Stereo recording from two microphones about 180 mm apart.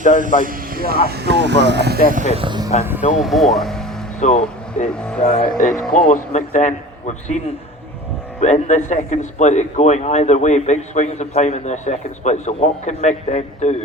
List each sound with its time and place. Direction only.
0.0 s speech: 45° right (ahead or behind); by 2.1 s 65° right (ahead or behind)
2.1 s speech: 35° right (ahead or behind)
3.2 s speech: centre (ahead or behind)
4.2 s speech: 40° left (ahead or behind)
4.9 s speech: 5° left (ahead or behind)
5.2 s a man's voice: 35° left (ahead or behind)
5.5 s speech: 45° left (ahead or behind)
5.7 s speech: 5° left (ahead or behind)
6.1 s a man's voice: 45° left (ahead or behind)
8.4 s a man's voice: 35° left (ahead or behind)